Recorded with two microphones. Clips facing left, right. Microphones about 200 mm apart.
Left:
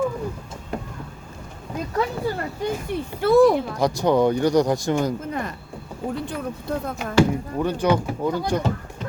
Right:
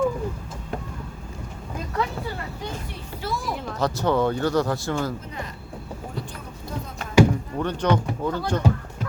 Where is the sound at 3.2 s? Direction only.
60° left (ahead or behind).